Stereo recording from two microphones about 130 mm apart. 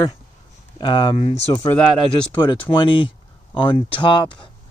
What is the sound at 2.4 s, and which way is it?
Speech, 40° left (ahead or behind).